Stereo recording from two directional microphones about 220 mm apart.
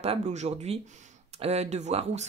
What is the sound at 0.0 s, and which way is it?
Speech, 30° right (ahead or behind).